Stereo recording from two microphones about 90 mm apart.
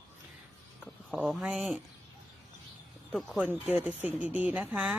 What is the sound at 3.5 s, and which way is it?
Speech, 20° right (ahead or behind).